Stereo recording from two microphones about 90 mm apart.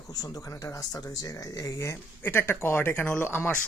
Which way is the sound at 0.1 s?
45° left (ahead or behind).